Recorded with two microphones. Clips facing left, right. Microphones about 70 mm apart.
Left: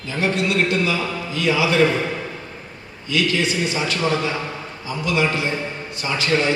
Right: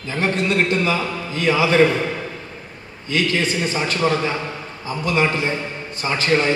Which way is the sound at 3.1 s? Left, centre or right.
Right.